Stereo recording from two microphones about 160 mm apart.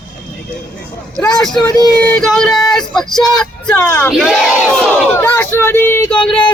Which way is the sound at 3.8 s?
15° left (ahead or behind).